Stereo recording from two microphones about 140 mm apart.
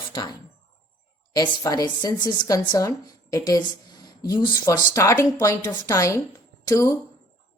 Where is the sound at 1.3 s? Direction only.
25° left (ahead or behind).